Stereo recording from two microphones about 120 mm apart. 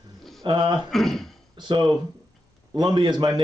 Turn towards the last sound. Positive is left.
turn(degrees=-40)  # may be behind; listen again after turning